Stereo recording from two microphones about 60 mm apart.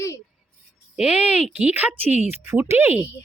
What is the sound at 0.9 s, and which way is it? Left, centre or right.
Speech, centre.